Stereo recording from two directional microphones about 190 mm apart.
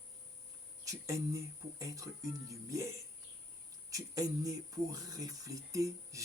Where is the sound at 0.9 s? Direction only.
15° right (ahead or behind).